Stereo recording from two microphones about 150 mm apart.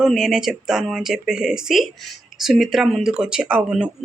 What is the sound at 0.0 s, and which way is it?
Speech, 5° right (ahead or behind).